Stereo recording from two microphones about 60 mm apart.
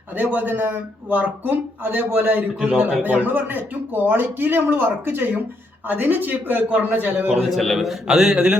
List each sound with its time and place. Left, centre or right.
0.2 s a man's voice: right
7.5 s a man's voice: centre